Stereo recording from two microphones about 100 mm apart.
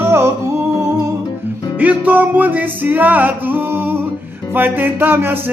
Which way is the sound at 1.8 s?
15° right (ahead or behind).